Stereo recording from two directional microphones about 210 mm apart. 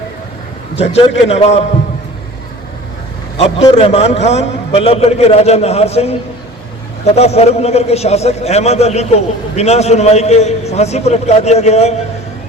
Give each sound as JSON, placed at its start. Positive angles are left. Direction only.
{"t": 0.8, "sound": "a man's voice", "side_deg": 30}
{"t": 3.3, "sound": "a man's voice", "side_deg": 25}
{"t": 7.2, "sound": "a man's voice", "side_deg": 30}